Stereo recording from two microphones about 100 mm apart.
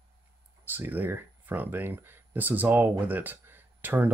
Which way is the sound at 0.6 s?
20° right (ahead or behind).